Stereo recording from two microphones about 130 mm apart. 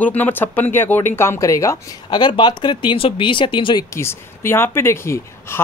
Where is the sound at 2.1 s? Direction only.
35° left (ahead or behind).